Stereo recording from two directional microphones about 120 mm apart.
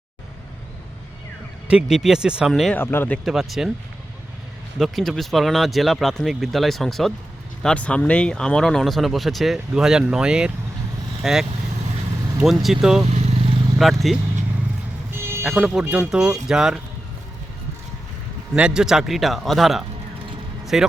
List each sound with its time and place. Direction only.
1.6 s speech: 5° right (ahead or behind)
2.5 s speech: 5° left (ahead or behind)
2.7 s speech: 20° left (ahead or behind)
3.2 s speech: centre (ahead or behind)
4.8 s speech: centre (ahead or behind)
13.1 s vehicle: 65° right (ahead or behind)
13.7 s speech: centre (ahead or behind)
15.2 s music: 20° right (ahead or behind)
15.4 s speech: 5° right (ahead or behind)
18.5 s speech: 5° right (ahead or behind)